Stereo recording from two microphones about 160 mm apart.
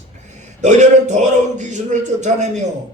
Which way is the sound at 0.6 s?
50° right (ahead or behind).